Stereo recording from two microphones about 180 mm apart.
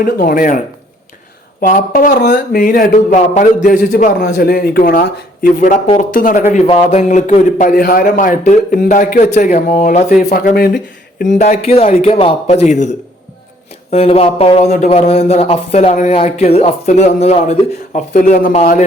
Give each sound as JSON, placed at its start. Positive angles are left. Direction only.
{"t": 0.0, "sound": "a man's voice", "side_deg": 55}
{"t": 1.6, "sound": "a man's voice", "side_deg": 50}
{"t": 11.3, "sound": "speech", "side_deg": 45}